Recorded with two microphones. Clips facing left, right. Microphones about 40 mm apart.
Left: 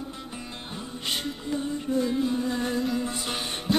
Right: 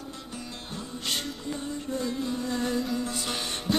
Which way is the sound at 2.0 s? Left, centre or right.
Centre.